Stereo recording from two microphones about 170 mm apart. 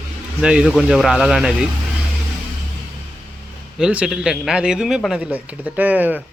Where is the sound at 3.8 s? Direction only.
5° right (ahead or behind).